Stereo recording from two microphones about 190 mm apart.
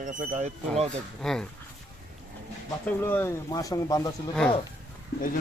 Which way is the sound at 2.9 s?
10° left (ahead or behind).